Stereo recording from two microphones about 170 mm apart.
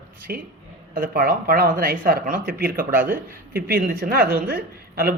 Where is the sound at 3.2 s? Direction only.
55° right (ahead or behind).